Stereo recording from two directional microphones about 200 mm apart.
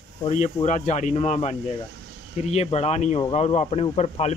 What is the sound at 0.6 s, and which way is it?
Speech, 35° left (ahead or behind).